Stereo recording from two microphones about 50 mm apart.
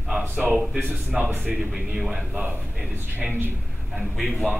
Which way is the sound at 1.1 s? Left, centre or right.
Right.